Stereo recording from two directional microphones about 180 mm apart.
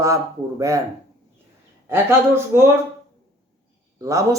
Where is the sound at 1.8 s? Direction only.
15° right (ahead or behind).